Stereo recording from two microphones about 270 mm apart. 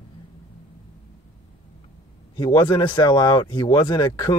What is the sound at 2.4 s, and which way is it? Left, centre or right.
Speech, centre.